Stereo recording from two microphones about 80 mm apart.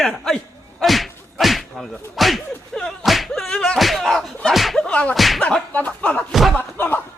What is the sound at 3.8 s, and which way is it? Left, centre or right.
Slap, centre.